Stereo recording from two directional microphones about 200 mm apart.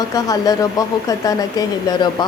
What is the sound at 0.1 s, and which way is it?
Speech, 20° left (ahead or behind).